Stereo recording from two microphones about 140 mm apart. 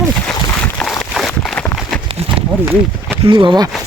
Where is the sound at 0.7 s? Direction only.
5° left (ahead or behind).